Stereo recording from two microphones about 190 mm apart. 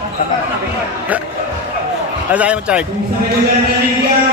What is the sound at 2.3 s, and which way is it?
Speech, 5° right (ahead or behind).